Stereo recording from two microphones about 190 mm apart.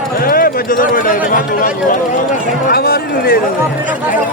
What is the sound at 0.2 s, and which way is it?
Speech, 50° left (ahead or behind).